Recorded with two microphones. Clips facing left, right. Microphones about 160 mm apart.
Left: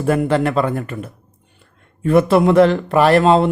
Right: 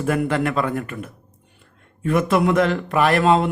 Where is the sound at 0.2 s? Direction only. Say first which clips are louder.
Left 4 dB; 30° left (ahead or behind).